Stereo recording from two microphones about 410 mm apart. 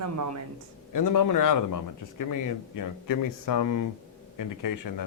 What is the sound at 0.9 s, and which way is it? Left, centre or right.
Speech, left.